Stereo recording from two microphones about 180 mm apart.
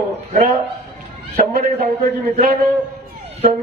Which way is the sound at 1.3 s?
50° right (ahead or behind).